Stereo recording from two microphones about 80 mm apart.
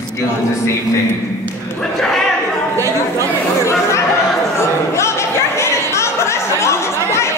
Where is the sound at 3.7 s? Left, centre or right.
Left.